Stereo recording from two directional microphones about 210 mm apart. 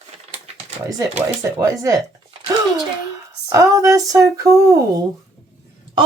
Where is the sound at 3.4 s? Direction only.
15° right (ahead or behind).